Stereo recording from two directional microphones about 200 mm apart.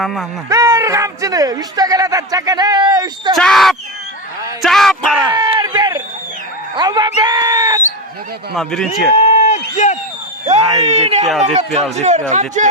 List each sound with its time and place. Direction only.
0.0 s speech: centre (ahead or behind)
0.5 s a man's voice: 15° right (ahead or behind)
3.3 s speech: centre (ahead or behind)
5.3 s a sound: 20° right (ahead or behind)
6.7 s speech: 20° right (ahead or behind)
8.5 s speech: centre (ahead or behind)
9.1 s a sound: 35° left (ahead or behind)
10.4 s speech: 35° right (ahead or behind)